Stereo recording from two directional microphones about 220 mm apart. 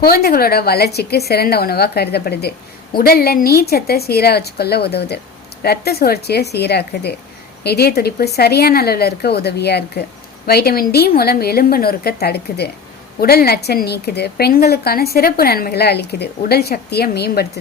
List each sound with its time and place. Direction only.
0.0 s a woman's voice: 45° left (ahead or behind)